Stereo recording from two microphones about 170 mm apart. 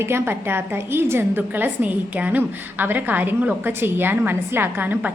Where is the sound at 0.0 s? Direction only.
15° right (ahead or behind).